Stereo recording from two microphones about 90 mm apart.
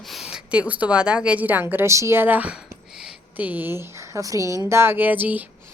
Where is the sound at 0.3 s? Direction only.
10° right (ahead or behind).